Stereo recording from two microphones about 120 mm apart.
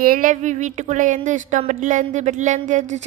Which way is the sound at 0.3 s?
90° right.